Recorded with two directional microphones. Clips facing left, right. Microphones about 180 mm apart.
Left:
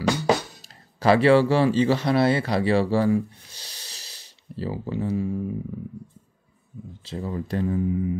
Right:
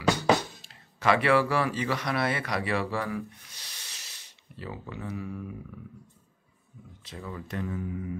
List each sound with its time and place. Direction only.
0.9 s speech: 35° left (ahead or behind)
7.1 s speech: 35° left (ahead or behind)